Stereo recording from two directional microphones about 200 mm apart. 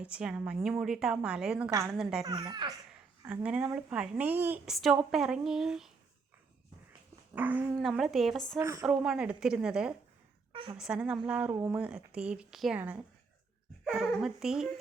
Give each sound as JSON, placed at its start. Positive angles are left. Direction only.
{"t": 0.0, "sound": "a woman's voice", "side_deg": -5}
{"t": 2.2, "sound": "speech", "side_deg": -20}
{"t": 3.2, "sound": "a woman's voice", "side_deg": -5}
{"t": 7.3, "sound": "a woman's voice", "side_deg": -10}
{"t": 8.5, "sound": "a woman's voice", "side_deg": -15}
{"t": 8.9, "sound": "a woman's voice", "side_deg": -5}
{"t": 10.5, "sound": "a woman's voice", "side_deg": -25}
{"t": 10.8, "sound": "a woman's voice", "side_deg": -5}